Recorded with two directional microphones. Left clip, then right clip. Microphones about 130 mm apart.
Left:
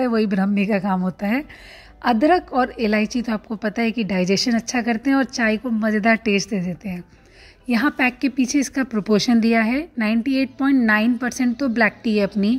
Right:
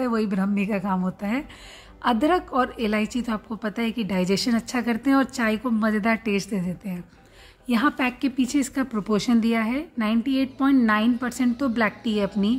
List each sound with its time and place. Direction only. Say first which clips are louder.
0.0 s a woman's voice: left 5 dB; 30° left (ahead or behind)
6.0 s a woman's voice: left 6 dB; 30° left (ahead or behind)